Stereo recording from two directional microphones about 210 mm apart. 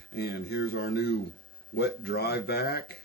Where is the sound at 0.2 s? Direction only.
50° left (ahead or behind).